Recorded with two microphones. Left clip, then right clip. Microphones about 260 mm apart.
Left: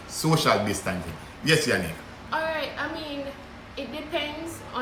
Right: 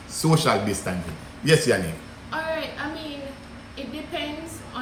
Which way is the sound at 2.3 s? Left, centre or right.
Centre.